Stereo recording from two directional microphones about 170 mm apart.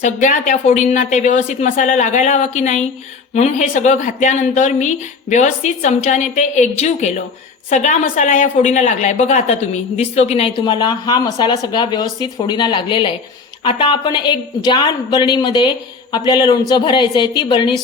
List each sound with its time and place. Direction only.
0.0 s speech: 45° left (ahead or behind); by 17.7 s 25° left (ahead or behind)